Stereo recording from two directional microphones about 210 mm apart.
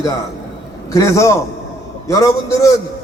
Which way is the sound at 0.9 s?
15° left (ahead or behind).